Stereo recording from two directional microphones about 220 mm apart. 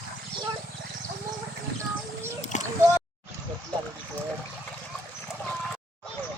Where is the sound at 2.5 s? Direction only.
35° left (ahead or behind).